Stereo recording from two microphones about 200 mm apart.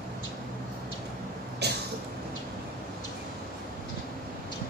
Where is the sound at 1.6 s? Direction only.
55° right (ahead or behind).